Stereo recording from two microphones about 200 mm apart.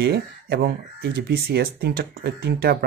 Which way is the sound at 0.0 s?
55° right (ahead or behind).